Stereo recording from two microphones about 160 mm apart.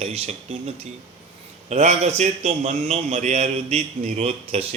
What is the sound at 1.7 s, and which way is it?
A man's voice, 40° right (ahead or behind).